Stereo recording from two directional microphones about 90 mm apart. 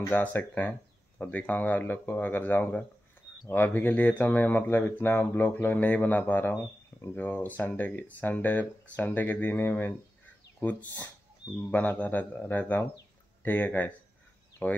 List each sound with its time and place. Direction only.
0.1 s speech: 20° left (ahead or behind)